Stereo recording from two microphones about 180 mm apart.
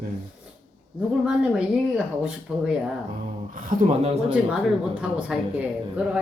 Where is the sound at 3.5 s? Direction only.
45° right (ahead or behind).